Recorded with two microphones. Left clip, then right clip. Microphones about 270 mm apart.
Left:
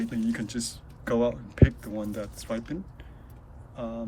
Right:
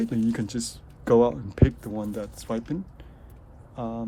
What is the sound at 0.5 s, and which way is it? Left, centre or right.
Speech, centre.